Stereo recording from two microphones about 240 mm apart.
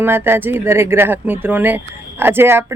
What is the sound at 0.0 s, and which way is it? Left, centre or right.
Speech, centre.